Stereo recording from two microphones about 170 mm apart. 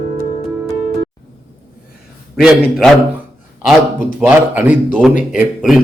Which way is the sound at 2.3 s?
Centre (ahead or behind).